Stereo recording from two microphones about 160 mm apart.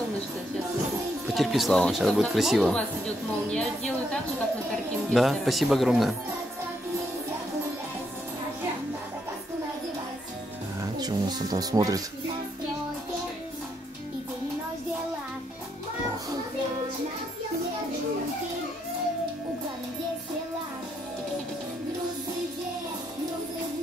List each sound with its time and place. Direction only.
1.2 s speech: centre (ahead or behind)
11.0 s music: 25° right (ahead or behind)